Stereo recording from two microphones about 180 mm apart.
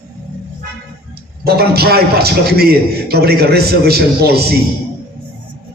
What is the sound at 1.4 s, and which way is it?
A man's voice, 60° right (ahead or behind).